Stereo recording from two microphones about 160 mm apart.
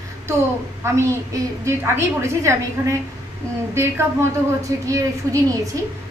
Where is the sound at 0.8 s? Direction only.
15° right (ahead or behind).